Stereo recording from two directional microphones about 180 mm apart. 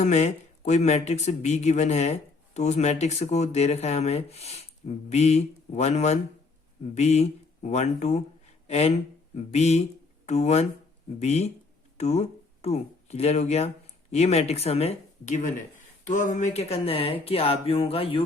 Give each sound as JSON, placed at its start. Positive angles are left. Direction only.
{"t": 0.0, "sound": "speech", "side_deg": 40}